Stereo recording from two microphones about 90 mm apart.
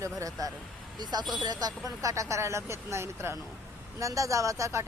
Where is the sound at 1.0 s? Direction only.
50° right (ahead or behind).